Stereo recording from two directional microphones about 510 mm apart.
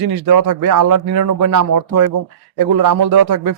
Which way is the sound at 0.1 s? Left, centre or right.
Right.